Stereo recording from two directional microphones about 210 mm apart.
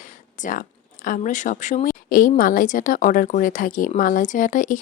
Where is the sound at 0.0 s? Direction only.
35° left (ahead or behind).